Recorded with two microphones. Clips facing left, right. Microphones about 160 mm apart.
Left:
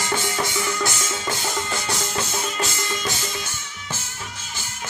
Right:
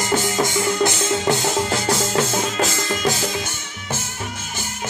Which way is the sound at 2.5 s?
90° right.